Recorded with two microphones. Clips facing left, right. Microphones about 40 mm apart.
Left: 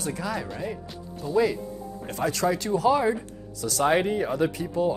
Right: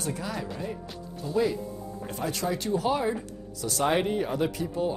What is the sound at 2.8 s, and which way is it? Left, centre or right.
Speech, left.